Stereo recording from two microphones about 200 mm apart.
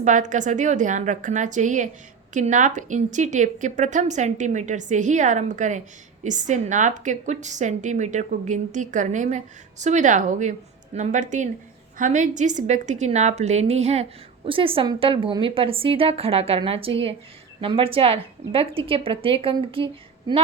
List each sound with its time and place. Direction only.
0.0 s a woman's voice: 40° right (ahead or behind)